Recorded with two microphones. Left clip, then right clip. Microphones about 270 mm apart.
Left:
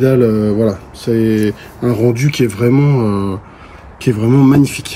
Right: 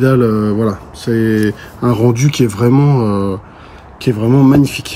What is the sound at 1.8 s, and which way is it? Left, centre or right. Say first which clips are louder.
Speech: right 1 dB; centre.